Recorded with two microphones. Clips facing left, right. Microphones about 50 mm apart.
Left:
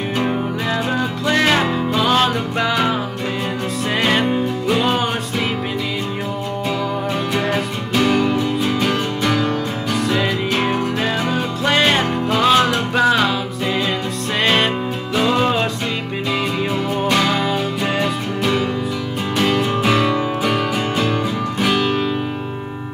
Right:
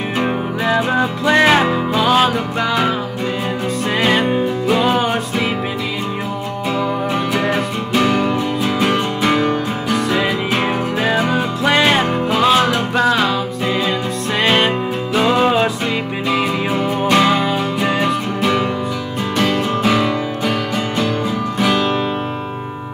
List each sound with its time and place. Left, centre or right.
0.2 s music: centre
2.0 s music: centre
4.0 s music: centre
7.4 s music: centre
8.8 s music: right
9.8 s music: centre
14.4 s music: centre
17.1 s music: centre
19.3 s music: centre